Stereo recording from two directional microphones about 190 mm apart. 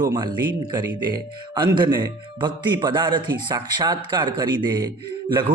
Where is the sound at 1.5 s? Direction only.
25° right (ahead or behind).